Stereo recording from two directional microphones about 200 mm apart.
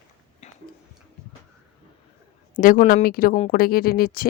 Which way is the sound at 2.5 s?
40° left (ahead or behind).